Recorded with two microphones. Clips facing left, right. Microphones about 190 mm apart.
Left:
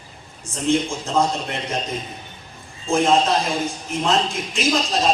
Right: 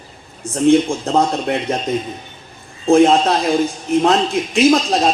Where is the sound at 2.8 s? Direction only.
60° right (ahead or behind).